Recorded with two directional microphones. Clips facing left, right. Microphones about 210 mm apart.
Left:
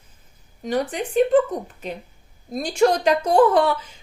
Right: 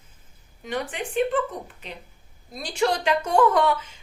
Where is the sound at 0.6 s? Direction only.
40° left (ahead or behind).